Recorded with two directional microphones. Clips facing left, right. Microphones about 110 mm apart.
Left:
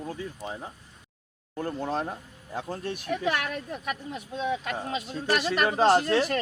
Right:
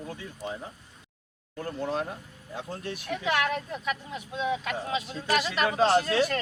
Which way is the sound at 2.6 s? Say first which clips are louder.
Left 3 dB; 45° left (ahead or behind).